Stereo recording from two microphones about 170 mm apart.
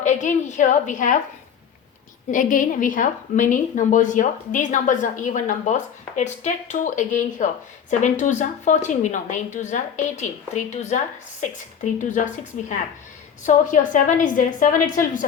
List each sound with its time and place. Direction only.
0.0 s a woman's voice: 45° left (ahead or behind)
2.3 s a woman's voice: 50° left (ahead or behind)